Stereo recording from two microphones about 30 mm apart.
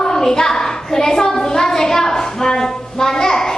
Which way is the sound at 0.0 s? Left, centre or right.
Centre.